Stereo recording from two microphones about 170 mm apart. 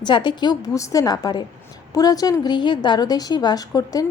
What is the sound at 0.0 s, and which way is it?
A woman's voice, 25° left (ahead or behind).